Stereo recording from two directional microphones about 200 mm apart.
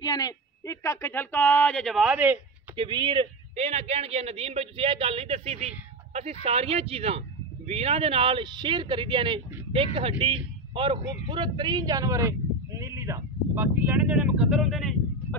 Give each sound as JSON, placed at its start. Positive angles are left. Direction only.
{"t": 0.0, "sound": "speech", "side_deg": 20}
{"t": 2.7, "sound": "a man's voice", "side_deg": -25}